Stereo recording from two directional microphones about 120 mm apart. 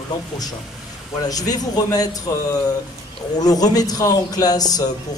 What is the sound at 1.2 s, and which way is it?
A man's voice, 30° left (ahead or behind).